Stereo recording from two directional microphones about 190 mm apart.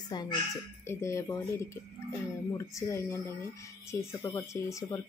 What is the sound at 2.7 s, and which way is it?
Speech, 15° left (ahead or behind).